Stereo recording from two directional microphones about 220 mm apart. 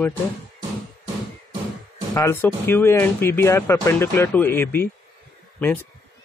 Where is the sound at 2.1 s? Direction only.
10° left (ahead or behind).